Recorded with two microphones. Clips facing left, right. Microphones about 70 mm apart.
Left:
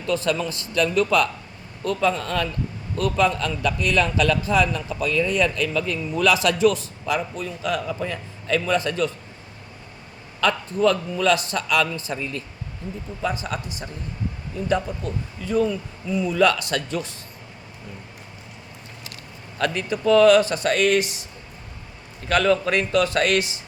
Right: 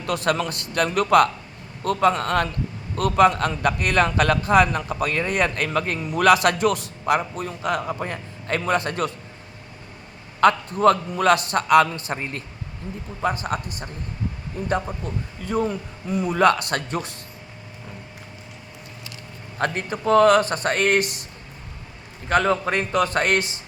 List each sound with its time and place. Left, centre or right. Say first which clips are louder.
0.0 s a man's voice: even; right
6.0 s a man's voice: right 4 dB; right
10.4 s a man's voice: right 4 dB; right
19.5 s a man's voice: left 1 dB; right
22.3 s a man's voice: left 1 dB; right